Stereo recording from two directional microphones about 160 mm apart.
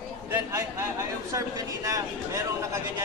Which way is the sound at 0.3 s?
20° right (ahead or behind).